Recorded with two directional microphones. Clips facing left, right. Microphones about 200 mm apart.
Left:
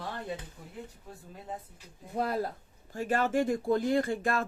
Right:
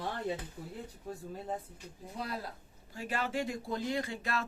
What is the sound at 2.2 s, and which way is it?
Speech, 50° left (ahead or behind).